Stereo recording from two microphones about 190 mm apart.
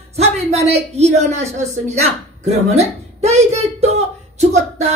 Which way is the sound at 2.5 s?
35° right (ahead or behind).